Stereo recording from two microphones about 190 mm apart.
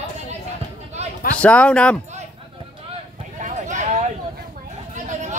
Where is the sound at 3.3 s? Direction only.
40° right (ahead or behind).